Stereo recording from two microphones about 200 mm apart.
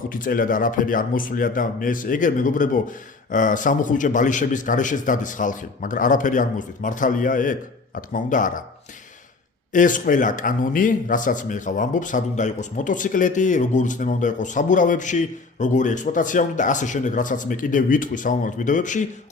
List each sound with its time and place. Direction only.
0.1 s speech: 45° left (ahead or behind)
9.7 s speech: 40° left (ahead or behind)